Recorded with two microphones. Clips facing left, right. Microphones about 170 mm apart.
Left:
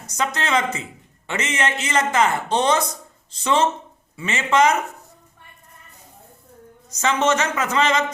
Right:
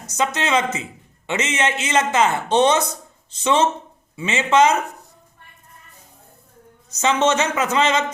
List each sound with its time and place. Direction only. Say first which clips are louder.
0.1 s speech: right 2 dB; 20° right (ahead or behind)
7.0 s speech: right 2 dB; 20° right (ahead or behind)